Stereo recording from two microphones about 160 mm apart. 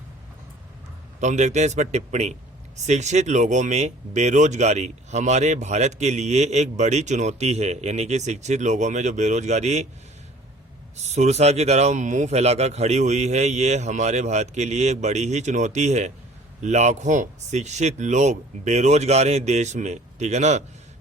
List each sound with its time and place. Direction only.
1.2 s speech: 45° right (ahead or behind)
10.9 s speech: 45° right (ahead or behind)